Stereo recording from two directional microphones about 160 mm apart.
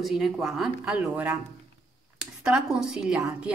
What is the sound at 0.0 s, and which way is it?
A woman's voice, centre (ahead or behind).